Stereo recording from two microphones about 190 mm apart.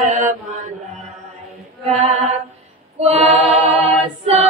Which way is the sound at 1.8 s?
35° right (ahead or behind).